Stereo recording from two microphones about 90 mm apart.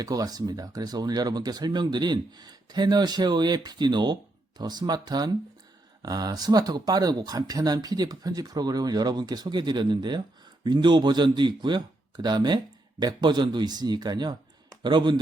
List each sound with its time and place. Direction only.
0.0 s speech: 45° right (ahead or behind)